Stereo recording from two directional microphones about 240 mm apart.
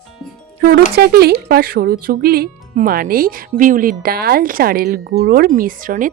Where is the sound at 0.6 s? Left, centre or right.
Right.